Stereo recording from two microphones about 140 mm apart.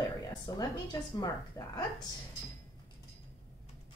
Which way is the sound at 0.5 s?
30° left (ahead or behind).